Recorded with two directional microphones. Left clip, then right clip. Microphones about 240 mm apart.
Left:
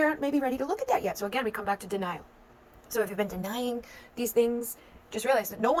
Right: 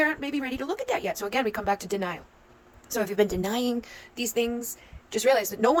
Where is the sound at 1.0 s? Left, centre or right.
Right.